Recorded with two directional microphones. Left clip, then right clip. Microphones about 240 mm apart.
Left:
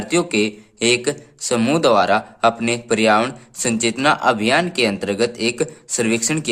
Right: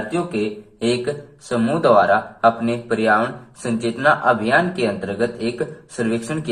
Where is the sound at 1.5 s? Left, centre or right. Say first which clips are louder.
Even; left.